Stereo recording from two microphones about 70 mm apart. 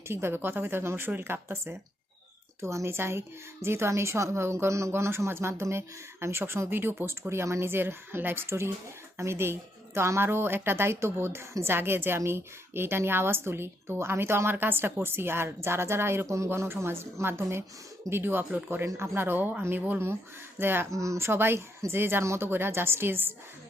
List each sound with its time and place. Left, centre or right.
0.1 s a woman's voice: right
20.9 s a woman's voice: right